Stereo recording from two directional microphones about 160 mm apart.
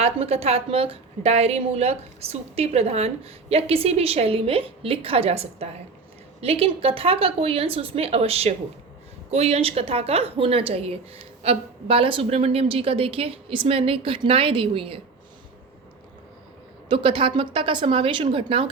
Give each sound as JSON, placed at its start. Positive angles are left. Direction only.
{"t": 0.0, "sound": "a woman's voice", "side_deg": -40}
{"t": 16.9, "sound": "a woman's voice", "side_deg": -30}